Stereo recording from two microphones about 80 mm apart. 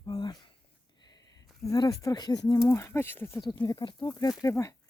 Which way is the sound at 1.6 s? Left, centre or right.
Left.